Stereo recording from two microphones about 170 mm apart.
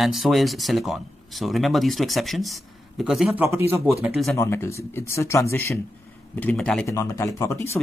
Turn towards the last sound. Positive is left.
turn(degrees=15)  # may be behind; listen again after turning